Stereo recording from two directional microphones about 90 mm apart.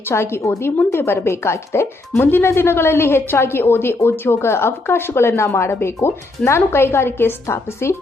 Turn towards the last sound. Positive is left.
turn(degrees=30)  # may be behind; listen again after turning